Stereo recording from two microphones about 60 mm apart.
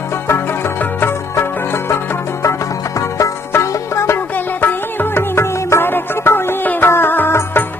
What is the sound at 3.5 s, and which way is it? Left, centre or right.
Music, left.